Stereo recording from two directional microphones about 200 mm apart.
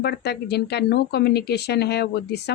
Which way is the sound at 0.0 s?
55° left (ahead or behind).